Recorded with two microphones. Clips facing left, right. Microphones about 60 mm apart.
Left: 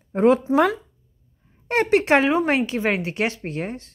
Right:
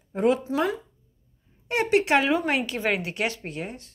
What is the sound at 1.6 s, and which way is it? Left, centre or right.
A woman's voice, left.